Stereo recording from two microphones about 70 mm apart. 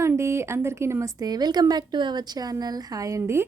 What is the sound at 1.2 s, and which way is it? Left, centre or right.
A woman's voice, right.